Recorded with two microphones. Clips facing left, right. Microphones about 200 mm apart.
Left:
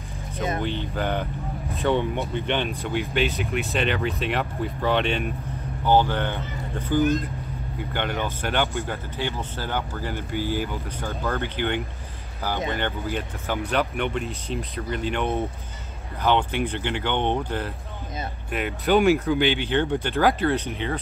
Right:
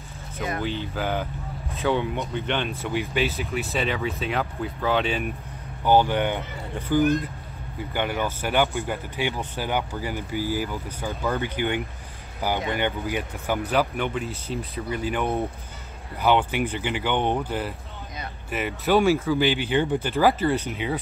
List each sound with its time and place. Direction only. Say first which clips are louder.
0.4 s a sound: left 2 dB; 20° left (ahead or behind)
0.7 s speech: left 1 dB; 5° right (ahead or behind)
1.7 s vehicle: left 1 dB; centre (ahead or behind)
2.5 s speech: left 1 dB; 15° left (ahead or behind)
2.9 s speech: even; centre (ahead or behind)
5.9 s speech: right 1 dB; 15° right (ahead or behind)